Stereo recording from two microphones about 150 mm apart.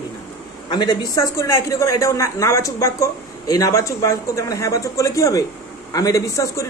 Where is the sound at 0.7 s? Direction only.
30° left (ahead or behind).